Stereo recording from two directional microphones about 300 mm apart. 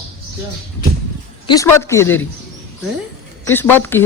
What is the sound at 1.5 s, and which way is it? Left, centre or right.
Speech, centre.